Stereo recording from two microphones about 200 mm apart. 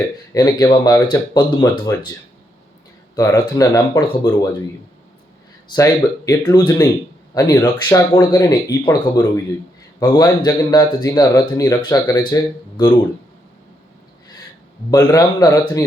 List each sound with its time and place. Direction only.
0.3 s speech: 20° left (ahead or behind)
3.2 s speech: 15° left (ahead or behind)
5.6 s speech: 15° left (ahead or behind)
14.8 s speech: 20° left (ahead or behind)